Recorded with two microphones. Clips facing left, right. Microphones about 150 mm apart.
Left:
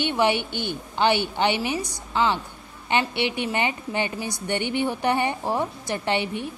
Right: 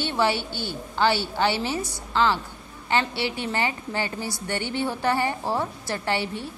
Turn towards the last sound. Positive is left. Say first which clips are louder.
# left 2 dB
turn(degrees=20)  # may be behind; listen again after turning